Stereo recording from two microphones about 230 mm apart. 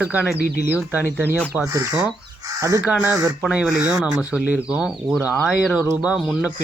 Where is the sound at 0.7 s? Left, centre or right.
Centre.